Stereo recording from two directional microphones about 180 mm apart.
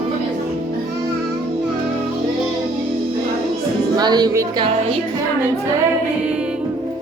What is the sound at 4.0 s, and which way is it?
Speech, 25° right (ahead or behind).